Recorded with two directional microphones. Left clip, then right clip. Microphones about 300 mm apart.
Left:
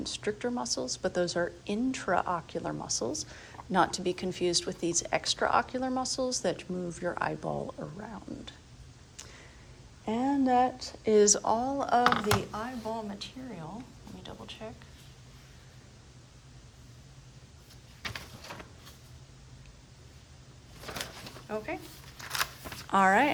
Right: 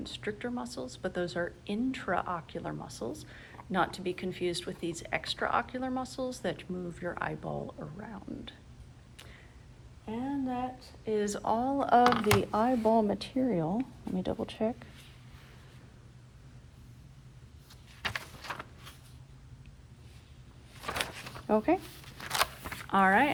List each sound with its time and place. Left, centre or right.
0.0 s speech: centre
10.1 s speech: left; by 12.4 s centre
12.5 s speech: centre
20.8 s a sound: centre
22.9 s speech: centre